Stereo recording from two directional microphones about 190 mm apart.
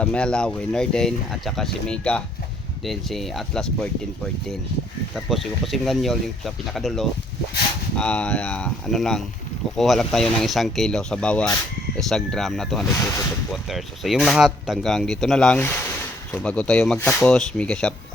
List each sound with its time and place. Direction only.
0.0 s speech: 5° left (ahead or behind)
5.1 s speech: centre (ahead or behind)
12.9 s speech: 15° left (ahead or behind)
13.7 s speech: centre (ahead or behind)